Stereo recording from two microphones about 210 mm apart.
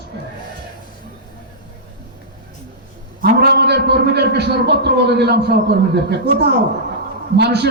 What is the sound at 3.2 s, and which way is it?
A man's voice, 50° right (ahead or behind).